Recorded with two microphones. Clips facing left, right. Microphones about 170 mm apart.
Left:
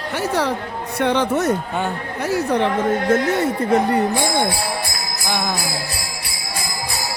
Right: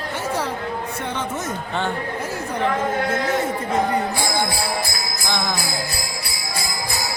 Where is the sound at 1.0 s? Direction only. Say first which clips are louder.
Left 9 dB; 70° left (ahead or behind).